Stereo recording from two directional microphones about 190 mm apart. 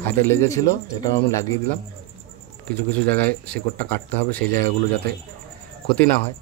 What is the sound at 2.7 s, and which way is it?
Speech, 10° left (ahead or behind).